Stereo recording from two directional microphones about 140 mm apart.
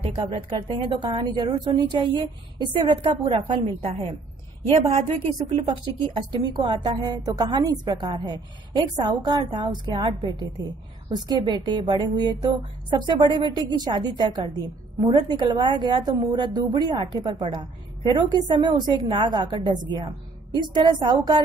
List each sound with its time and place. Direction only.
0.0 s a woman's voice: 50° right (ahead or behind)
0.6 s a woman's voice: 35° right (ahead or behind)
6.1 s a woman's voice: 35° right (ahead or behind)